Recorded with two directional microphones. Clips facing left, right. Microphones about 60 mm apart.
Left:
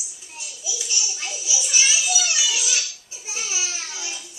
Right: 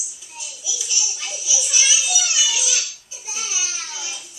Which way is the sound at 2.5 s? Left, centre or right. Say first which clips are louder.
Even; left.